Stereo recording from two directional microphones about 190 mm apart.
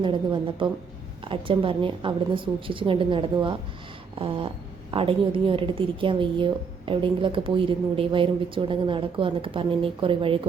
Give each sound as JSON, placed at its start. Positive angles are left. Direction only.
{"t": 0.0, "sound": "a woman's voice", "side_deg": -25}